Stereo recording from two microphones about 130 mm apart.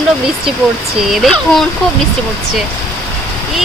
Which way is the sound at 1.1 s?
Centre (ahead or behind).